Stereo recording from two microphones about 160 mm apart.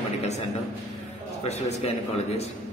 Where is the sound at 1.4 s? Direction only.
45° left (ahead or behind).